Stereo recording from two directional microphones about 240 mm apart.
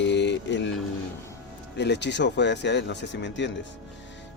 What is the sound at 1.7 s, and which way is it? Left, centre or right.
Speech, left.